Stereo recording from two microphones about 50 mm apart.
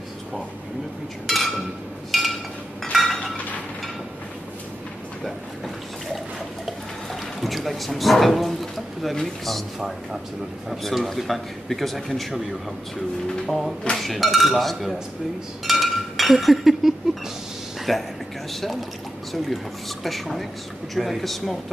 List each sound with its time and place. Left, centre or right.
1.2 s a man's voice: centre
2.0 s a sound: centre
2.8 s chink: centre
3.1 s chink: left
7.3 s a man's voice: centre
10.7 s a man's voice: centre
13.5 s a man's voice: centre
15.6 s chink: centre
17.9 s a man's voice: centre